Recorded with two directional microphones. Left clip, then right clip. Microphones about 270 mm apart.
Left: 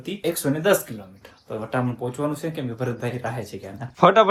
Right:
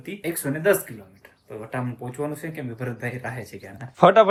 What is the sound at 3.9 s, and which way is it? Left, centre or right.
Speech, centre.